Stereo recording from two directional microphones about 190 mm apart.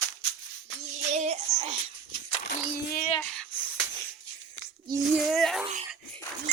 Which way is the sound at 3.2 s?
5° left (ahead or behind).